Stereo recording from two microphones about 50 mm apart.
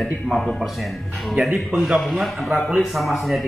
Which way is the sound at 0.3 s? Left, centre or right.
Centre.